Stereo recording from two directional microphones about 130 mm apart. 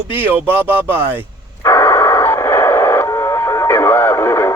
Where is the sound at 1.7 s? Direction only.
15° left (ahead or behind).